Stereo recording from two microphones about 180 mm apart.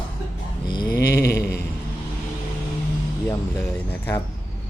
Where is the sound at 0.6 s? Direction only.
25° left (ahead or behind).